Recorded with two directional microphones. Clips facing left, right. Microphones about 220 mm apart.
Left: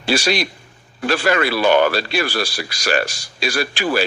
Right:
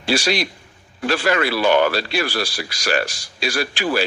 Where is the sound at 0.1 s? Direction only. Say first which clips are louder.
Left 1 dB; 50° left (ahead or behind).